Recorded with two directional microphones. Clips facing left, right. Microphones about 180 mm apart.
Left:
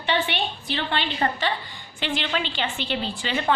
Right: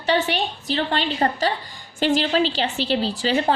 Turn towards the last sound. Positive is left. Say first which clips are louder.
# right 6 dB
turn(degrees=-35)  # may be behind; listen again after turning